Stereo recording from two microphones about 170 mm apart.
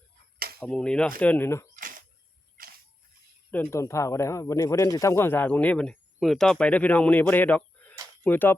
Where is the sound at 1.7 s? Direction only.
55° right (ahead or behind).